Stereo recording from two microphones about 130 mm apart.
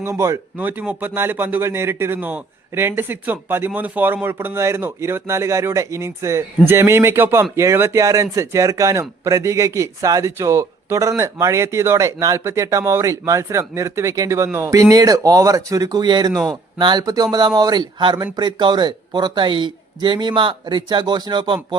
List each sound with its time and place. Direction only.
0.0 s speech: 20° right (ahead or behind); by 21.8 s 35° right (ahead or behind)